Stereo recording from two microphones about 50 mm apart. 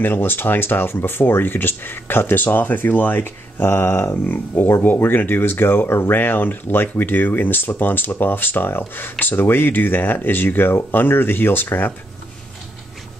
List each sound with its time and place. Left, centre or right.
0.0 s speech: left
2.4 s speech: left